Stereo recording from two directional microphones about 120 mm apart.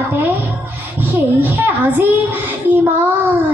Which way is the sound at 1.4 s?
15° right (ahead or behind).